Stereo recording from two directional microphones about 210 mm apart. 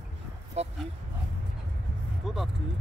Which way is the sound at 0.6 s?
30° right (ahead or behind).